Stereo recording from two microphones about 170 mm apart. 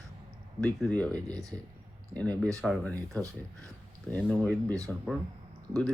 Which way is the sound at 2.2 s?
5° left (ahead or behind).